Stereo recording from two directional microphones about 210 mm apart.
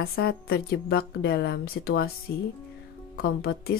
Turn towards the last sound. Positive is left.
turn(degrees=50)  # may be behind; listen again after turning